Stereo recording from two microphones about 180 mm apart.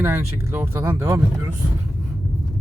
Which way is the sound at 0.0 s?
10° right (ahead or behind).